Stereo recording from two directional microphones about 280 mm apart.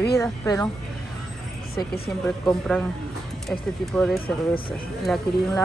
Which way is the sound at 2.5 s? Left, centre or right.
Centre.